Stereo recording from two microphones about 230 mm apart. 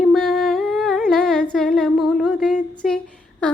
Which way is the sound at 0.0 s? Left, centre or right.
Centre.